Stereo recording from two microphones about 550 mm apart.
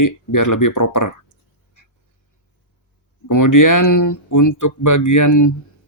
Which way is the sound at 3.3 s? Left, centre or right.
Left.